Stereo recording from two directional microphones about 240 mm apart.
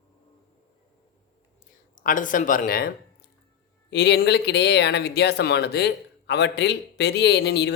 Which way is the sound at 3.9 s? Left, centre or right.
Left.